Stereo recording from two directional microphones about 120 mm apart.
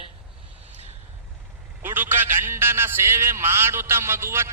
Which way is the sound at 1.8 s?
15° right (ahead or behind).